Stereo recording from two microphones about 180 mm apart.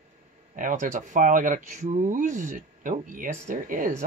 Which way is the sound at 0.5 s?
45° right (ahead or behind).